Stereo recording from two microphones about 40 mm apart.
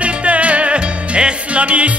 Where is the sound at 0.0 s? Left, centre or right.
Right.